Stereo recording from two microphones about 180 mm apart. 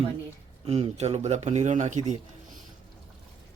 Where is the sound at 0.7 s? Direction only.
35° right (ahead or behind).